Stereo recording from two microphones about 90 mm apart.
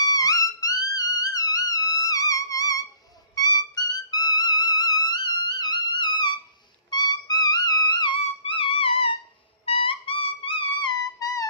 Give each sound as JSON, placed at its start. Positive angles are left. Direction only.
{"t": 0.0, "sound": "music", "side_deg": 45}